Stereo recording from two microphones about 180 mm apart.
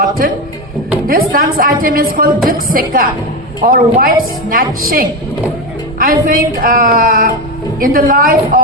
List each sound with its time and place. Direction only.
1.0 s a woman's voice: 55° right (ahead or behind)